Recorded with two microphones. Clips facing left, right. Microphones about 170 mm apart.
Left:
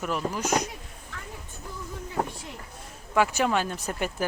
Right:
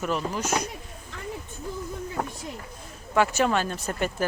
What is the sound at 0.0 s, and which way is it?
Speech, 10° left (ahead or behind).